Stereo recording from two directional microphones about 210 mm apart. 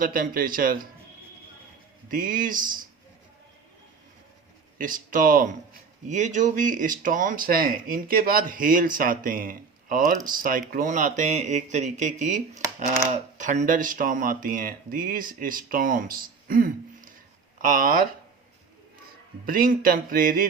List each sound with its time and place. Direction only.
0.0 s speech: 40° right (ahead or behind)
2.0 s speech: 40° right (ahead or behind)
4.8 s speech: 40° right (ahead or behind)
19.5 s speech: 40° right (ahead or behind)